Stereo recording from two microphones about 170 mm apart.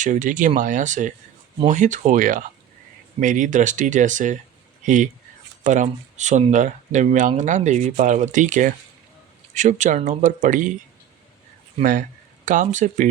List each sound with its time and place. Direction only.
0.0 s speech: 50° right (ahead or behind)
5.6 s speech: 45° right (ahead or behind)
11.8 s speech: 50° right (ahead or behind)